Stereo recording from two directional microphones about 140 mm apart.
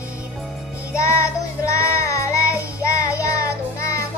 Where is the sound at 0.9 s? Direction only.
20° left (ahead or behind).